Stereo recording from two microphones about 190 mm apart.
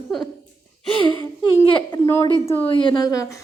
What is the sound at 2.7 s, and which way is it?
Speech, 25° left (ahead or behind).